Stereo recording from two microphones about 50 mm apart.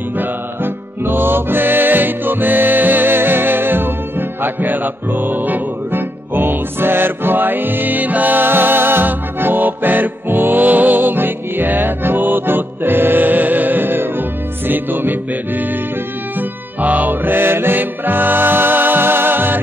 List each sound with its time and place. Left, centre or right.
1.0 s music: right